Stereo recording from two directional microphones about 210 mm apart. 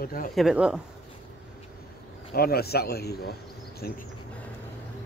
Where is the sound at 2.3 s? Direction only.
45° left (ahead or behind).